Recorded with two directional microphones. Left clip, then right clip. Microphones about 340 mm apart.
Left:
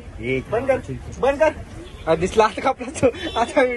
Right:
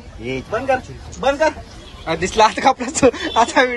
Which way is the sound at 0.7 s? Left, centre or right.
Right.